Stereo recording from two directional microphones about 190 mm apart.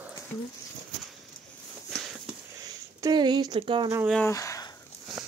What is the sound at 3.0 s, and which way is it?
Speech, 20° right (ahead or behind).